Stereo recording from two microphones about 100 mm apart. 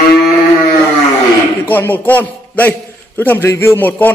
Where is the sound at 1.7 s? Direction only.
20° left (ahead or behind).